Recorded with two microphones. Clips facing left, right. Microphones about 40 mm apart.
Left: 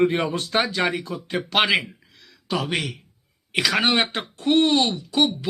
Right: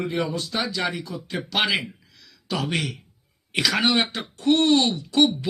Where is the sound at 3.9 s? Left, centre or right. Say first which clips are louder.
Left 1 dB; left.